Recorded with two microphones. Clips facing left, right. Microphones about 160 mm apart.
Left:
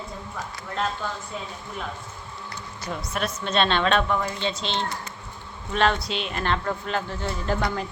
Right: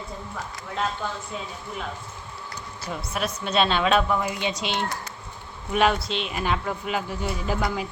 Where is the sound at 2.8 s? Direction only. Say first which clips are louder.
Even; 5° right (ahead or behind).